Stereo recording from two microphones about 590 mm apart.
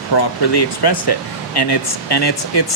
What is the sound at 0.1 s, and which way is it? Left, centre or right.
Speech, left.